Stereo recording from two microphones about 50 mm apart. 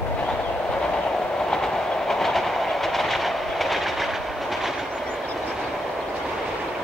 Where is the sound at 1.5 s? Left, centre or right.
Centre.